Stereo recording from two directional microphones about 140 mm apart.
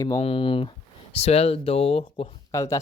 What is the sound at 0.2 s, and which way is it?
Speech, 40° left (ahead or behind).